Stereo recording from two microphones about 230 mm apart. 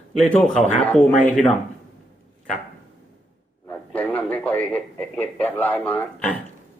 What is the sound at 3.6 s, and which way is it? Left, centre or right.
A man's voice, centre.